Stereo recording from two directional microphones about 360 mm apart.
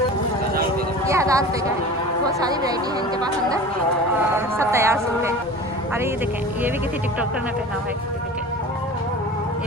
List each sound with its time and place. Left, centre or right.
1.0 s vehicle: centre
4.5 s a woman's voice: centre